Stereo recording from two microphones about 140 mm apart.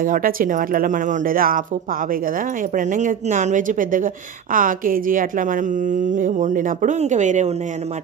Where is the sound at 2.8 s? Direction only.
65° right (ahead or behind).